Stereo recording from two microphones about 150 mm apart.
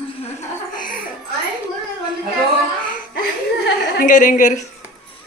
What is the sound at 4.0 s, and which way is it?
Speech, 60° left (ahead or behind).